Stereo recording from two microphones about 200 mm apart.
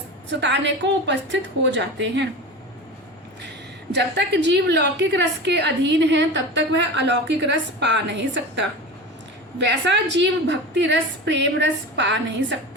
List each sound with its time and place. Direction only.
0.3 s a woman's voice: 60° right (ahead or behind)
3.9 s a woman's voice: 60° right (ahead or behind)